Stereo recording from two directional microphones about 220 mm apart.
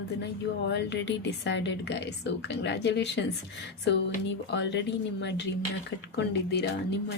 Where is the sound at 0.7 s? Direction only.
55° left (ahead or behind).